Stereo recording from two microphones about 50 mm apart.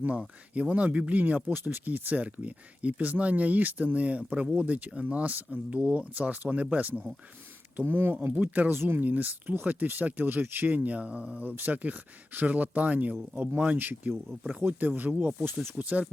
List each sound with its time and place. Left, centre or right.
0.2 s speech: right
7.9 s speech: right
8.4 s speech: right
8.7 s speech: right
9.0 s speech: right
13.7 s speech: right